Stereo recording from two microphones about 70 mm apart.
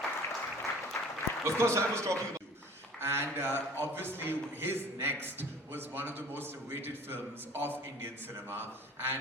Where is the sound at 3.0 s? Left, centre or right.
Right.